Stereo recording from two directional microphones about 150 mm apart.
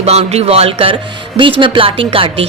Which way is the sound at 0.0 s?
45° right (ahead or behind).